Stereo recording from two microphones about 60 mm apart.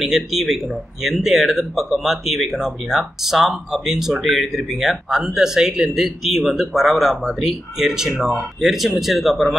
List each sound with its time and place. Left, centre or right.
0.0 s speech: centre